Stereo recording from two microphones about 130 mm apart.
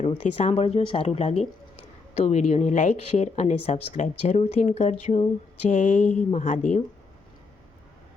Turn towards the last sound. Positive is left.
turn(degrees=70)  # may be behind; listen again after turning